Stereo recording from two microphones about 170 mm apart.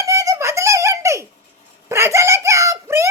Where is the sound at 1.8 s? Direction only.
15° right (ahead or behind).